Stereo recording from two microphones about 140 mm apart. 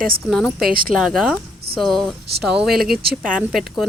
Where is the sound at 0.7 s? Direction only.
90° right.